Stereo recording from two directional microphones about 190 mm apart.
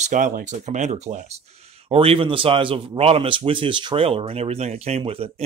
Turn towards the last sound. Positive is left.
turn(degrees=-30)  # may be behind; listen again after turning